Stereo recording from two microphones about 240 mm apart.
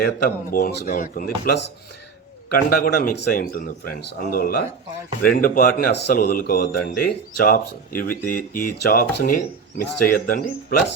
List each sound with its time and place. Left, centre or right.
0.0 s speech: left